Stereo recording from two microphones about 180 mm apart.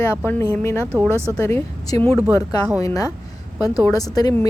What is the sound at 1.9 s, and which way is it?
Speech, 30° right (ahead or behind).